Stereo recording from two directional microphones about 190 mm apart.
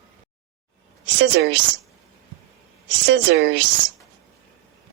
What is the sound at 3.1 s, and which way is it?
Speech, 70° right (ahead or behind).